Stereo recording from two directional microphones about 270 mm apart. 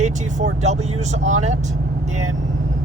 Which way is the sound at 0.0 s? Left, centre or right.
Right.